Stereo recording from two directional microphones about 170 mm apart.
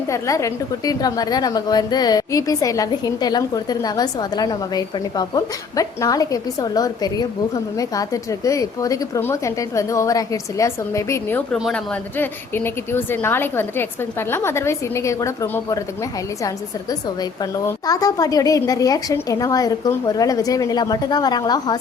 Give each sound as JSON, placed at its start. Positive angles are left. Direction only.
{"t": 0.1, "sound": "a woman's voice", "side_deg": 20}
{"t": 11.5, "sound": "speech", "side_deg": 0}
{"t": 12.1, "sound": "a woman's voice", "side_deg": 10}
{"t": 17.7, "sound": "a woman's voice", "side_deg": 20}